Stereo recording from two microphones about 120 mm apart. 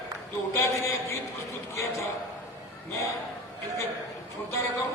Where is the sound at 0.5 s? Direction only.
25° left (ahead or behind).